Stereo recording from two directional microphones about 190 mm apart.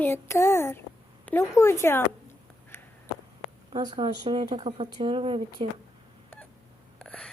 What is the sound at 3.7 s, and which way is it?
Speech, 25° right (ahead or behind).